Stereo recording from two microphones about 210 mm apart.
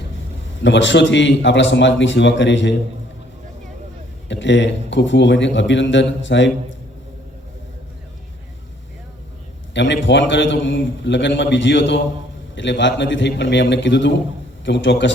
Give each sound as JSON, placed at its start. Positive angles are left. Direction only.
{"t": 0.6, "sound": "speech", "side_deg": 60}
{"t": 4.3, "sound": "speech", "side_deg": 60}
{"t": 9.7, "sound": "speech", "side_deg": 60}